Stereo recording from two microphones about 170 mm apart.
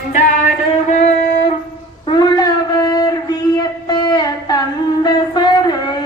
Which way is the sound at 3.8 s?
25° left (ahead or behind).